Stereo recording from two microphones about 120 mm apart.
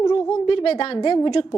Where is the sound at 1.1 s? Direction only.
40° left (ahead or behind).